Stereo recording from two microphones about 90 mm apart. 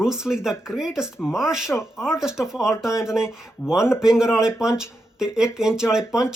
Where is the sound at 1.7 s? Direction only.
30° left (ahead or behind).